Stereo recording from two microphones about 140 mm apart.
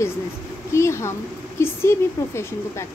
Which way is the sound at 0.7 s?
20° left (ahead or behind).